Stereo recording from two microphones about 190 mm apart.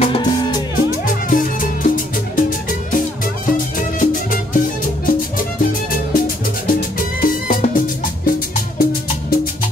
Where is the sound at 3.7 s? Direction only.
45° left (ahead or behind).